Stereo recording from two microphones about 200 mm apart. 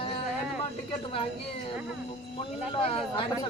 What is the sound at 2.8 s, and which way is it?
Speech, 30° left (ahead or behind).